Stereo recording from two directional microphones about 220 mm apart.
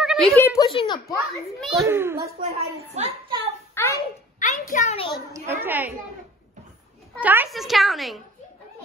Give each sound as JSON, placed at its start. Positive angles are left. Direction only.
{"t": 0.0, "sound": "a sound", "side_deg": 0}
{"t": 0.4, "sound": "speech", "side_deg": 15}
{"t": 1.3, "sound": "a woman's voice", "side_deg": 0}
{"t": 1.9, "sound": "a child's voice", "side_deg": -10}
{"t": 2.4, "sound": "a woman's voice", "side_deg": -30}
{"t": 3.7, "sound": "a sound", "side_deg": 10}
{"t": 4.4, "sound": "a child's voice", "side_deg": 35}
{"t": 5.3, "sound": "a child's voice", "side_deg": -10}
{"t": 7.2, "sound": "a woman's voice", "side_deg": -5}